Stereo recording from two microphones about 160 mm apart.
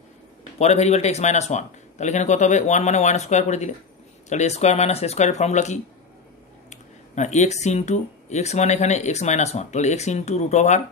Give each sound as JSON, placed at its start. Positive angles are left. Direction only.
{"t": 0.6, "sound": "speech", "side_deg": 45}